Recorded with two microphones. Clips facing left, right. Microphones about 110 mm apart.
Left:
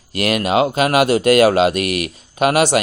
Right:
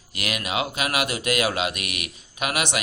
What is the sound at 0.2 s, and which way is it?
Speech, 40° left (ahead or behind).